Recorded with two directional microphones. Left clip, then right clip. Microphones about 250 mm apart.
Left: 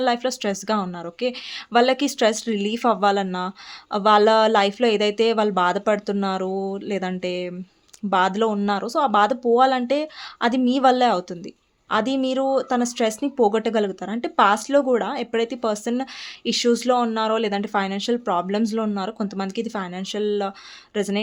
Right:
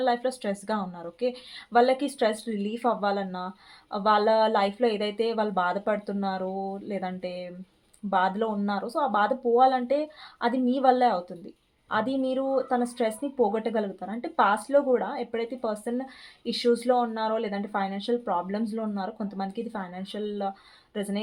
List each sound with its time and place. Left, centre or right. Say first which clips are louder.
0.0 s speech: left 4 dB; left